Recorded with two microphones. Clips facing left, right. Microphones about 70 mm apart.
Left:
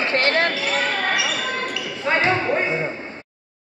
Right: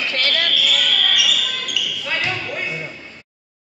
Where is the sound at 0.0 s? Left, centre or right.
Left.